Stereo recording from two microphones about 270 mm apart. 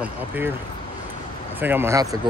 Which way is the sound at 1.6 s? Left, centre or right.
Centre.